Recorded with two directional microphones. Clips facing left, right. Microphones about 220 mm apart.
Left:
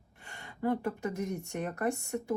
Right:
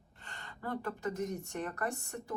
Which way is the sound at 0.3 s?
15° left (ahead or behind).